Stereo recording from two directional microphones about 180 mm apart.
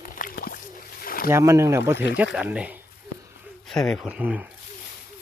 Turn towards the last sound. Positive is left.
turn(degrees=-10)  # may be behind; listen again after turning